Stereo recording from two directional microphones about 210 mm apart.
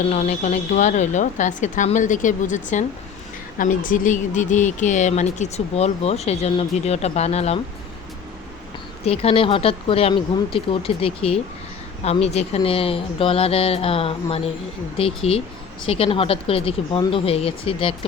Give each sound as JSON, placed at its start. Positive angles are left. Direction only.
{"t": 0.1, "sound": "speech", "side_deg": 30}
{"t": 9.0, "sound": "speech", "side_deg": 25}